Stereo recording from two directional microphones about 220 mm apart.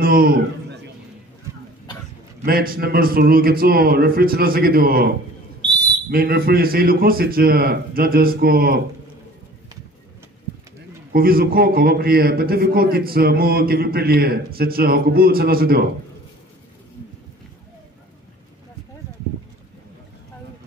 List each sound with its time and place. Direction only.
0.0 s a man's voice: 40° right (ahead or behind)
2.4 s a man's voice: 40° right (ahead or behind)
11.1 s a man's voice: 40° right (ahead or behind)